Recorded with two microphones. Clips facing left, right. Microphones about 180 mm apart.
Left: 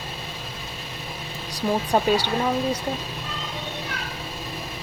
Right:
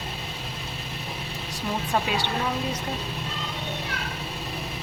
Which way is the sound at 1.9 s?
35° left (ahead or behind).